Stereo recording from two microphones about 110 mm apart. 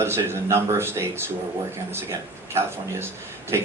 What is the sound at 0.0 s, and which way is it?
A man's voice, 20° right (ahead or behind).